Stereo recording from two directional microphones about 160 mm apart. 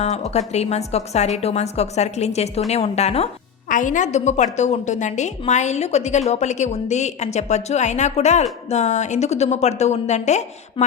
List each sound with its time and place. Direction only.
0.0 s a woman's voice: 45° left (ahead or behind)
3.7 s a woman's voice: 55° left (ahead or behind)